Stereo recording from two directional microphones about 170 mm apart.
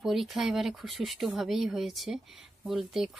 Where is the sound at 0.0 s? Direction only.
Centre (ahead or behind).